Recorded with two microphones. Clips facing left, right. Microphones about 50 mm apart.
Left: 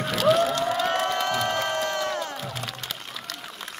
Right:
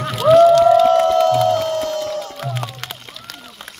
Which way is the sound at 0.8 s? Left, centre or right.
Left.